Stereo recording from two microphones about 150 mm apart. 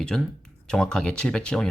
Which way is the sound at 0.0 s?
5° left (ahead or behind).